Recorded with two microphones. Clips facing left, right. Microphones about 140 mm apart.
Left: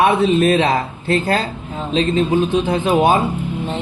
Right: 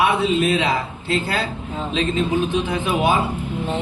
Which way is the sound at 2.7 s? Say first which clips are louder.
Left 7 dB; 40° left (ahead or behind).